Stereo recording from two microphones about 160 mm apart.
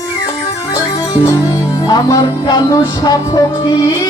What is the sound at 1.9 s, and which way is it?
Music, 25° left (ahead or behind).